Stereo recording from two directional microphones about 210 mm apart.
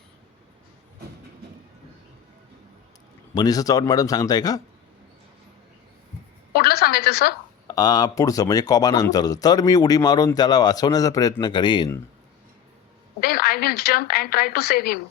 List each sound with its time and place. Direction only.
3.3 s speech: 15° left (ahead or behind)
6.5 s a sound: 45° left (ahead or behind)
7.7 s speech: 20° left (ahead or behind)
13.1 s a woman's voice: 45° left (ahead or behind)